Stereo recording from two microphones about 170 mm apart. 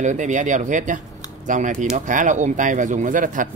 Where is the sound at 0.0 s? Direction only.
45° right (ahead or behind).